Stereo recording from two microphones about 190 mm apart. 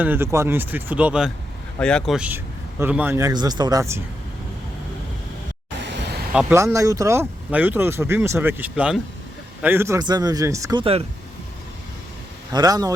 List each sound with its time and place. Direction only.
0.0 s speech: 10° right (ahead or behind)
1.8 s speech: 5° left (ahead or behind); by 4.0 s 15° right (ahead or behind)
6.3 s speech: 10° right (ahead or behind); by 11.0 s 25° right (ahead or behind)
12.5 s speech: 20° right (ahead or behind)